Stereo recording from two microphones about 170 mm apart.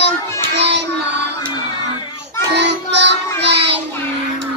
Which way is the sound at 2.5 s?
90° right.